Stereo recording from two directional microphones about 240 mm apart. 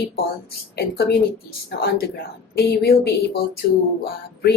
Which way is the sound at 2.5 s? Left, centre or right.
Left.